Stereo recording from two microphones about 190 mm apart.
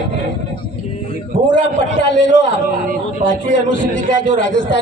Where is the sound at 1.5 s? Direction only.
70° left (ahead or behind).